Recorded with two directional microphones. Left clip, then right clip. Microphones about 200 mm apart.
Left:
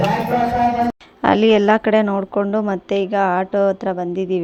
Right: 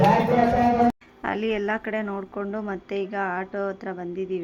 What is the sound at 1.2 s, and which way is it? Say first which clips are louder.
A woman's voice: left 12 dB; 45° left (ahead or behind).